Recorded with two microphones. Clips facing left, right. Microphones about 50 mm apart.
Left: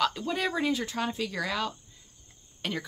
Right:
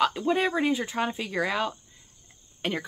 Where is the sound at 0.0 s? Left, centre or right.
Right.